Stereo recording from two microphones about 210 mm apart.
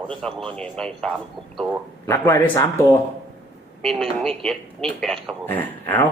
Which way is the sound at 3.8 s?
5° left (ahead or behind).